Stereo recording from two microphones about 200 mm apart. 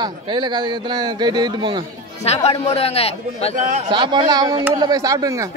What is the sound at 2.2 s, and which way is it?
A man's voice, 30° left (ahead or behind).